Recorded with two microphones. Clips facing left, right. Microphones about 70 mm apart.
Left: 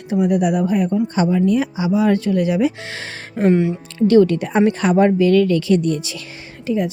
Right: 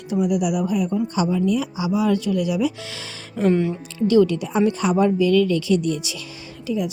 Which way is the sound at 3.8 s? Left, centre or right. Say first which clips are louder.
Left 4 dB; left.